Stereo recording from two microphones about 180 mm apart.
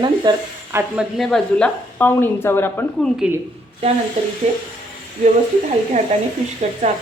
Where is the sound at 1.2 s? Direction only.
5° left (ahead or behind).